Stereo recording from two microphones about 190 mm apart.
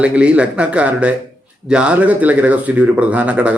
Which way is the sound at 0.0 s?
5° right (ahead or behind).